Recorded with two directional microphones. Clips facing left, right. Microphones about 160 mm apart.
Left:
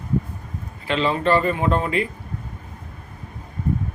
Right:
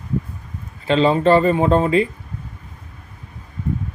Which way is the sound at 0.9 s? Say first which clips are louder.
Right 6 dB; 30° right (ahead or behind).